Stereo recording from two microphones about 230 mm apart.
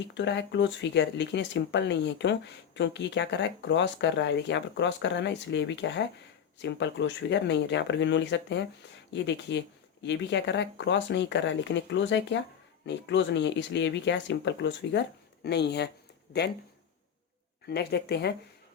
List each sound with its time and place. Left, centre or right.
0.1 s speech: left
17.7 s speech: left